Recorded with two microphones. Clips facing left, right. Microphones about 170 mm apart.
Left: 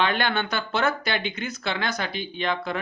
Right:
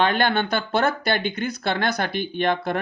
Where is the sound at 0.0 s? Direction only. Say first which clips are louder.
Right 4 dB; 45° right (ahead or behind).